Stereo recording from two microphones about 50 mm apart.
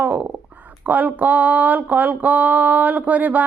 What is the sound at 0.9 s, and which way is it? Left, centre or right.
Speech, right.